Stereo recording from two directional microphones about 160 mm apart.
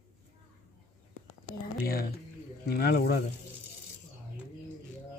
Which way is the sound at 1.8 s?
70° left (ahead or behind).